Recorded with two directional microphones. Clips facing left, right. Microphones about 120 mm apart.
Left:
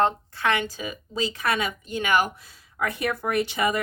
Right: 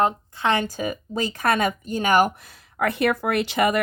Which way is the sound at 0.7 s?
50° right (ahead or behind).